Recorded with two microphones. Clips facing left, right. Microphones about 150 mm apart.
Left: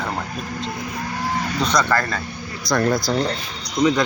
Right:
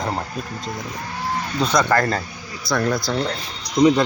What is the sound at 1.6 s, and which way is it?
Speech, 5° right (ahead or behind).